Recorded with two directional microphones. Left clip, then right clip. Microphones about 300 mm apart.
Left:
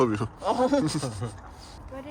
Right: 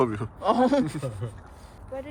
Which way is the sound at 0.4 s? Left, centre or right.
Right.